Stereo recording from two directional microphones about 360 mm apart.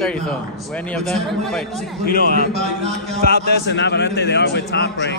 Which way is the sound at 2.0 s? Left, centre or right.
Left.